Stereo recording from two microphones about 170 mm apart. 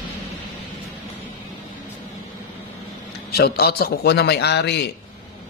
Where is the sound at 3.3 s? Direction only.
65° left (ahead or behind); by 4.9 s 85° left.